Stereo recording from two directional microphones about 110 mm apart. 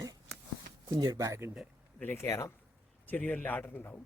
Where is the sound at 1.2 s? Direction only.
20° right (ahead or behind).